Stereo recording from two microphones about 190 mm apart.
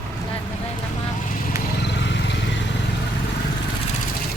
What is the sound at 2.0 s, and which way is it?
Vehicle, 70° left (ahead or behind).